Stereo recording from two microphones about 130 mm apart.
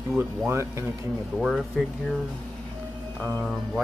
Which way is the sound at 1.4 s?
5° right (ahead or behind).